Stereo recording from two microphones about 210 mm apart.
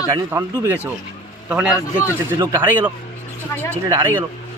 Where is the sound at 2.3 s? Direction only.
15° right (ahead or behind).